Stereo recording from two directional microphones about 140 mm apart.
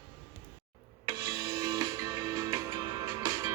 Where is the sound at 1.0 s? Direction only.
25° right (ahead or behind).